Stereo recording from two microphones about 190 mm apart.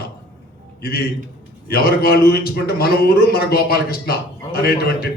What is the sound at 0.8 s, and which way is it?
A man's voice, 55° left (ahead or behind).